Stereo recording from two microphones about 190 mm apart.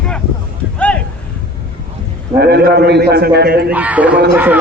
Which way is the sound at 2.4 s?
60° right (ahead or behind).